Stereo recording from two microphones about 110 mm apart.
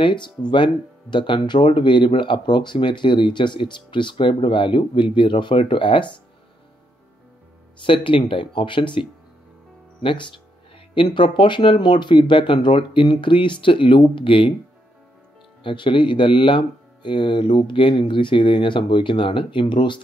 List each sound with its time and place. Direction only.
0.0 s speech: 45° left (ahead or behind)
7.8 s speech: 50° left (ahead or behind)
10.0 s speech: 50° left (ahead or behind)
15.6 s speech: 50° left (ahead or behind)